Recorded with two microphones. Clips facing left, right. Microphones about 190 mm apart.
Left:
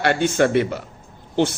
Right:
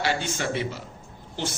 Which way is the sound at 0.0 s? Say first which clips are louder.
Left 9 dB; 60° left (ahead or behind).